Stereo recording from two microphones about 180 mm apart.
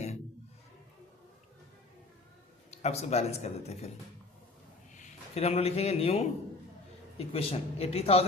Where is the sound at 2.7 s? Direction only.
35° left (ahead or behind).